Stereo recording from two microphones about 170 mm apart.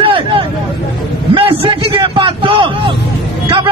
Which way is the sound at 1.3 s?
30° right (ahead or behind).